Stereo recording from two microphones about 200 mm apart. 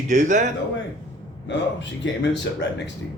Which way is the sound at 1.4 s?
60° left (ahead or behind).